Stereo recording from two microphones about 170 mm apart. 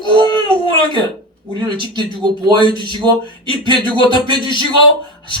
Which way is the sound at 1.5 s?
30° right (ahead or behind).